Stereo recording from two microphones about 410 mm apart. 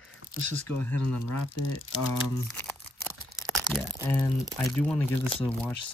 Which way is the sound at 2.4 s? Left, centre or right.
Centre.